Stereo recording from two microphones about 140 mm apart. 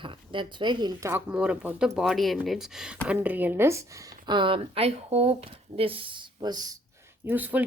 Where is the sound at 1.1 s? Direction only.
10° right (ahead or behind); by 6.7 s 30° right (ahead or behind).